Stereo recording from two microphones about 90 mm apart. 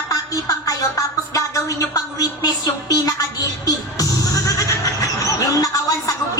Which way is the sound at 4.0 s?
40° left (ahead or behind).